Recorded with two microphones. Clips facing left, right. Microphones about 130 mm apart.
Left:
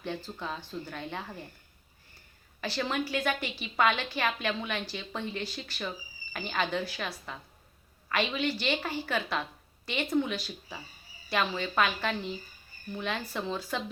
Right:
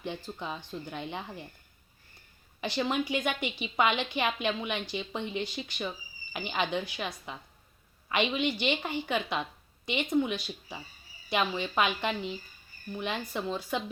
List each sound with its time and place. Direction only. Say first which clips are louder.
0.0 s a woman's voice: even; 15° right (ahead or behind)
2.6 s a woman's voice: right 2 dB; 15° right (ahead or behind)
8.1 s a woman's voice: right 1 dB; 15° right (ahead or behind)